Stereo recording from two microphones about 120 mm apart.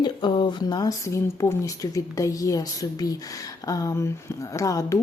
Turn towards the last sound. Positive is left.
turn(degrees=25)  # may be behind; listen again after turning